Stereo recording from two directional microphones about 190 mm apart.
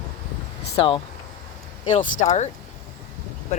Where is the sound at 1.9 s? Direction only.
40° left (ahead or behind).